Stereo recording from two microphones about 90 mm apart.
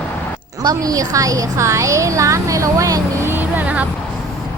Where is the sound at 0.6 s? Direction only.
45° right (ahead or behind).